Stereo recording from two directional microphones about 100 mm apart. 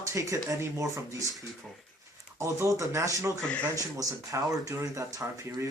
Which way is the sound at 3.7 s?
35° right (ahead or behind).